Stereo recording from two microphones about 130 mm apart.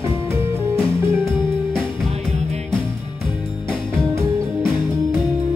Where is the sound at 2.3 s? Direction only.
55° right (ahead or behind).